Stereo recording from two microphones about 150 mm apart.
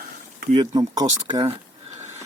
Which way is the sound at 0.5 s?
30° right (ahead or behind).